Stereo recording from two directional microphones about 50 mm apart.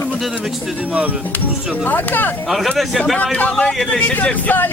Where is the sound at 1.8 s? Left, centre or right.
Left.